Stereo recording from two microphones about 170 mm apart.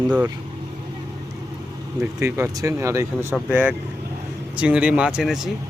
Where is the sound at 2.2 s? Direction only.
20° right (ahead or behind).